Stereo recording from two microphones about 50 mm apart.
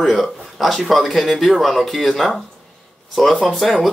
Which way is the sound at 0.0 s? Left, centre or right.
Centre.